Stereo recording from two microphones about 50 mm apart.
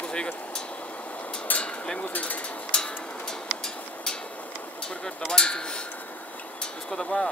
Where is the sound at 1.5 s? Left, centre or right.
Left.